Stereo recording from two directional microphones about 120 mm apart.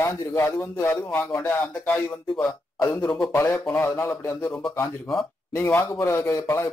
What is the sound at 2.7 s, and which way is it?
Speech, 25° left (ahead or behind).